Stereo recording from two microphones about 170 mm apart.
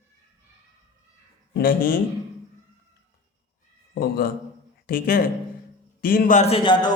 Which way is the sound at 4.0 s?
60° left (ahead or behind).